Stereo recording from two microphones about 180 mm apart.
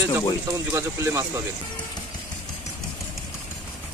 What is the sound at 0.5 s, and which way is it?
Speech, 15° right (ahead or behind).